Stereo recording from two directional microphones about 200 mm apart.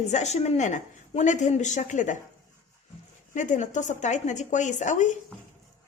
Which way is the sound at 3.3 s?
40° left (ahead or behind).